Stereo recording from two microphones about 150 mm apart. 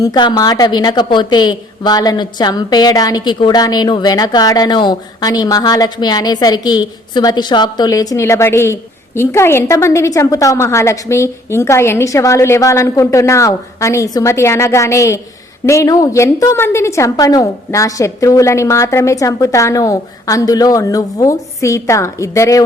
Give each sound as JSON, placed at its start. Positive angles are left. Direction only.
{"t": 0.0, "sound": "a woman's voice", "side_deg": 30}